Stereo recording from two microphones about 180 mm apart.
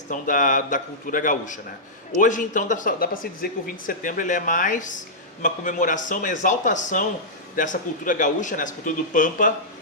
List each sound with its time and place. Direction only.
0.1 s speech: 45° left (ahead or behind)